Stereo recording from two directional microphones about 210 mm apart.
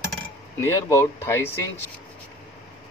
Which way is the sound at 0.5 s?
15° left (ahead or behind).